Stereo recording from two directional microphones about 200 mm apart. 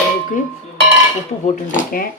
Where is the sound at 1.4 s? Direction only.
45° left (ahead or behind).